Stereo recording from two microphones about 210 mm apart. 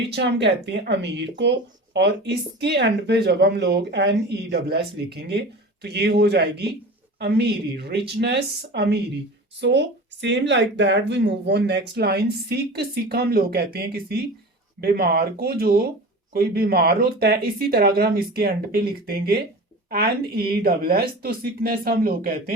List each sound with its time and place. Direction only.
0.1 s speech: 55° right (ahead or behind)